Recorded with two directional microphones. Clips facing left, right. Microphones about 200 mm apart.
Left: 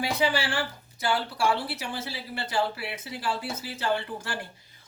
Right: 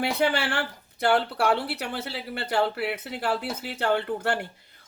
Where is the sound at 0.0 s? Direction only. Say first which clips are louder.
Right 2 dB; 60° right (ahead or behind).